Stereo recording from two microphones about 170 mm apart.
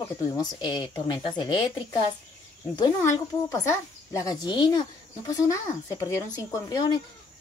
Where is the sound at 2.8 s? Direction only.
20° left (ahead or behind).